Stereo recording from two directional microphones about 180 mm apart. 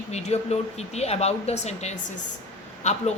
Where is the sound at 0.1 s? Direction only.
35° left (ahead or behind).